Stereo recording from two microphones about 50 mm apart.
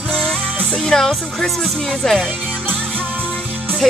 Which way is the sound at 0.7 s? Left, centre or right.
Centre.